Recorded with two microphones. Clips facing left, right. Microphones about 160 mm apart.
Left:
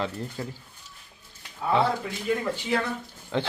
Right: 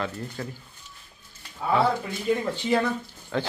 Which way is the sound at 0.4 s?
20° left (ahead or behind).